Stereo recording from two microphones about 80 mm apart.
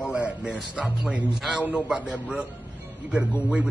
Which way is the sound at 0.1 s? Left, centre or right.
Centre.